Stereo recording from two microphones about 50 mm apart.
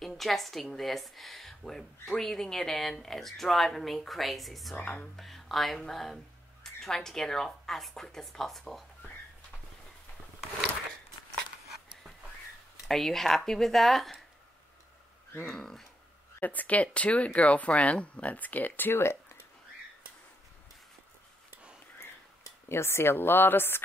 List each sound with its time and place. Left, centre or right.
0.0 s a woman's voice: centre
4.7 s speech: left
5.1 s a woman's voice: centre
12.8 s a woman's voice: centre
15.5 s speech: centre
16.3 s speech: left
22.7 s speech: left